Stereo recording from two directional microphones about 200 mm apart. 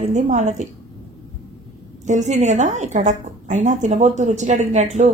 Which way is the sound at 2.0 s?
35° right (ahead or behind).